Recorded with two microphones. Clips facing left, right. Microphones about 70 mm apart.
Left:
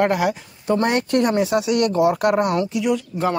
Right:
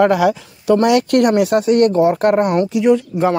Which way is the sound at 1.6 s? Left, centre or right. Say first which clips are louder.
Right 5 dB; right.